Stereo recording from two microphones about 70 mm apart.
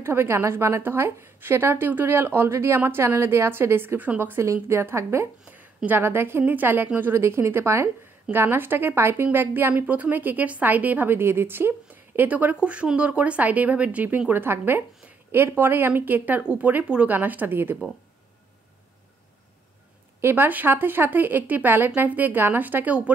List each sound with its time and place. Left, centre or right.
0.0 s a woman's voice: right
2.8 s a woman's voice: right
7.0 s a woman's voice: right
20.2 s a woman's voice: right